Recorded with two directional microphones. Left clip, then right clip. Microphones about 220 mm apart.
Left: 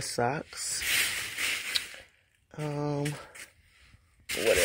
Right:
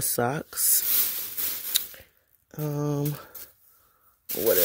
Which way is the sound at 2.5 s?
45° right (ahead or behind).